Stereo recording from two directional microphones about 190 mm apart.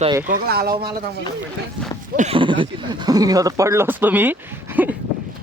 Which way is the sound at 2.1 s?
40° right (ahead or behind).